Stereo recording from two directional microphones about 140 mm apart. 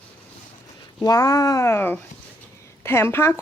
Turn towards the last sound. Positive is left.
turn(degrees=20)  # may be behind; listen again after turning